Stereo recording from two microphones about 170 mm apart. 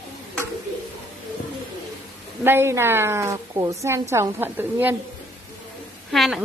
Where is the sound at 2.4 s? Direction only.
15° right (ahead or behind).